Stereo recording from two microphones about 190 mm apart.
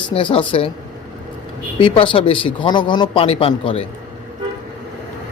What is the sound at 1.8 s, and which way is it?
Speech, 25° left (ahead or behind).